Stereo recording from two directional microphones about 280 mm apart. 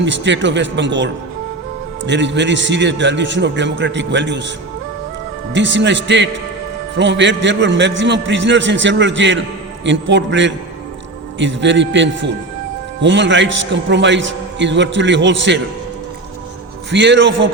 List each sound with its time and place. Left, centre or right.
0.0 s a man's voice: right
5.5 s a man's voice: right
16.9 s a man's voice: right